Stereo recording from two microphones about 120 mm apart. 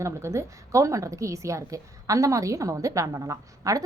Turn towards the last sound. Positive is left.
turn(degrees=-30)  # may be behind; listen again after turning